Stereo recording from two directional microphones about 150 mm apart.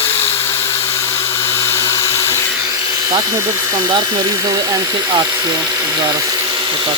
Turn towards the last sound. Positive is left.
turn(degrees=-25)  # may be behind; listen again after turning